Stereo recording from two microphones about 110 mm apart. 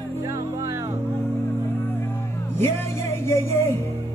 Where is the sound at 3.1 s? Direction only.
20° left (ahead or behind).